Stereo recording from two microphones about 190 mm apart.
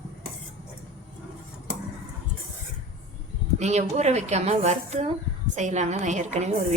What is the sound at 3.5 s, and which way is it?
A woman's voice, 35° right (ahead or behind).